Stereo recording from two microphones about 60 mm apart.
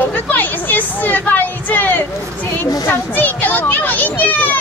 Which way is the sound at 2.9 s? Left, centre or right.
Left.